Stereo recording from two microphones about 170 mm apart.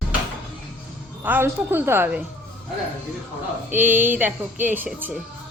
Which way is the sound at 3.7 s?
10° right (ahead or behind).